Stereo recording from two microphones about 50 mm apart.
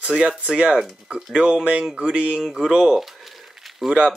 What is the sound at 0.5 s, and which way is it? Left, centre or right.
Speech, centre.